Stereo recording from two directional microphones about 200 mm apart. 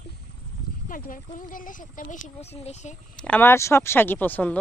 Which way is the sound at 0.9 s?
45° left (ahead or behind).